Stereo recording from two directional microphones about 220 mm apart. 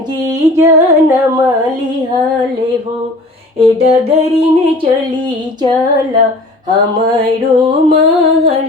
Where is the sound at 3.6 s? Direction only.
30° right (ahead or behind).